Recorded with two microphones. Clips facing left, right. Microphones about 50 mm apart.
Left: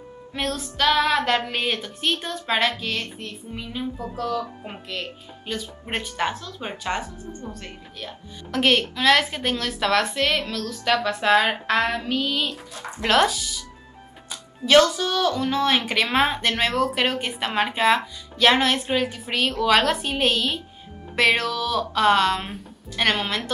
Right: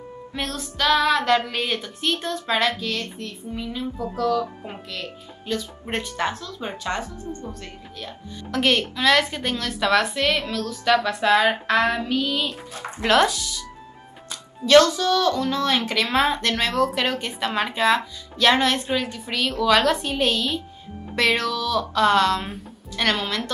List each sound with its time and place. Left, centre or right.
0.3 s a woman's voice: centre
5.5 s a woman's voice: centre
10.8 s speech: centre
12.7 s speech: right
13.0 s a woman's voice: centre
14.3 s music: centre
14.9 s a woman's voice: centre